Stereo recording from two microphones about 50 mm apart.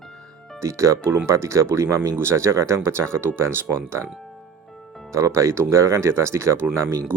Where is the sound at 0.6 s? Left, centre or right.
Right.